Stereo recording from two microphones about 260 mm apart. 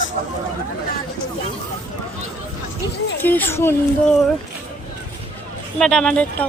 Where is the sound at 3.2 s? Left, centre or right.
Centre.